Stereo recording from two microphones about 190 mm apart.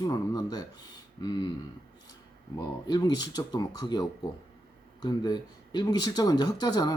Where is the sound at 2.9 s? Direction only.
20° left (ahead or behind).